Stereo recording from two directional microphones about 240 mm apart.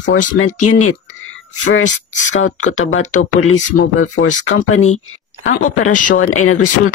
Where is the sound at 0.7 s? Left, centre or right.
Left.